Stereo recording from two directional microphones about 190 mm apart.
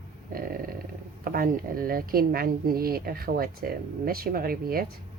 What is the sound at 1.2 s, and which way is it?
Speech, 50° right (ahead or behind).